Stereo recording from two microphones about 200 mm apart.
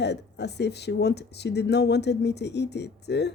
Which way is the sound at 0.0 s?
60° left (ahead or behind).